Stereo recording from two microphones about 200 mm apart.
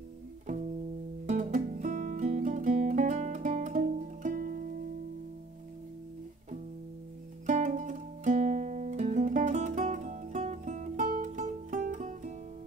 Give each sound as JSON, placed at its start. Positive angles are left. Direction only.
{"t": 1.2, "sound": "music", "side_deg": -35}
{"t": 7.4, "sound": "music", "side_deg": -35}